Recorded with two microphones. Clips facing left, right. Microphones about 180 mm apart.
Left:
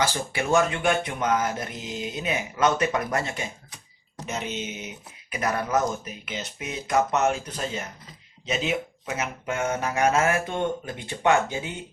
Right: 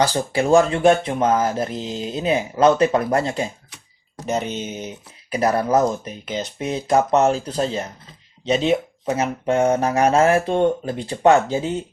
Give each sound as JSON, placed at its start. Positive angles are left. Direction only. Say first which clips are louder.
{"t": 0.0, "sound": "speech", "louder": "right 7 dB", "side_deg": -35}